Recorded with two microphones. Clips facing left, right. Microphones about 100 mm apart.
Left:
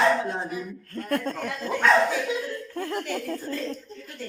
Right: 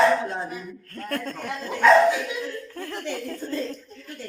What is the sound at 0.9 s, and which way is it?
Speech, 20° left (ahead or behind).